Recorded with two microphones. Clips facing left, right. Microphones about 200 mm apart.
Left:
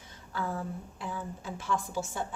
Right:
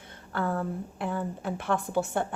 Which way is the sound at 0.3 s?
60° right (ahead or behind).